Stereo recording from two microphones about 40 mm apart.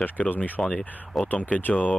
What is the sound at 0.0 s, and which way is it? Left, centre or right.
Speech, left.